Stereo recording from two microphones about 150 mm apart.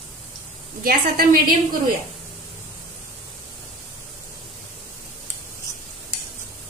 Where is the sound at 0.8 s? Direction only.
85° right.